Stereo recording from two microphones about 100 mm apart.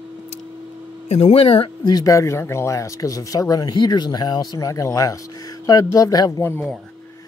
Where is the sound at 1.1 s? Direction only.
85° left; by 1.7 s 70° left (ahead or behind).